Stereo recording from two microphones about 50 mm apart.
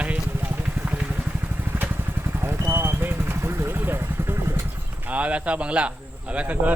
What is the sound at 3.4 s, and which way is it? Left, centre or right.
Vehicle, right.